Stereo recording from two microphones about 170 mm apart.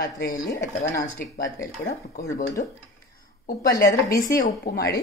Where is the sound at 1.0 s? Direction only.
55° left (ahead or behind).